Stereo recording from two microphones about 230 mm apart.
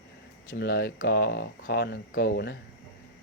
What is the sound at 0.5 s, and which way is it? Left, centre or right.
Speech, left.